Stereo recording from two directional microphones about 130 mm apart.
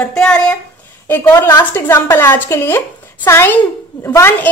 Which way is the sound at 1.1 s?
20° left (ahead or behind).